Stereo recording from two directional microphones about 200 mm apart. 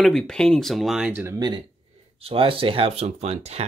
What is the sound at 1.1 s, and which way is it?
Speech, 15° right (ahead or behind).